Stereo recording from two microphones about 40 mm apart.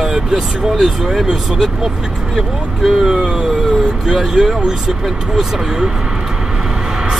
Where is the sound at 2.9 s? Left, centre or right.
Centre.